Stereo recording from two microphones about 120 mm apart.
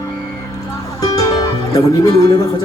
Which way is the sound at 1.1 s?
35° left (ahead or behind).